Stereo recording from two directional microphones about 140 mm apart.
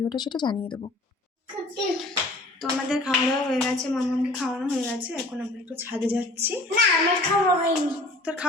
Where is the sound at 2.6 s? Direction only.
5° right (ahead or behind).